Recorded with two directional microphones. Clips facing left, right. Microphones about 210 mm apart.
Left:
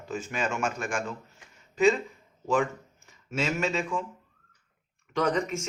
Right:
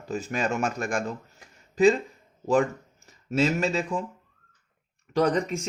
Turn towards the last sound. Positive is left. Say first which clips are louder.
# right 3 dB
turn(degrees=-35)  # may be behind; listen again after turning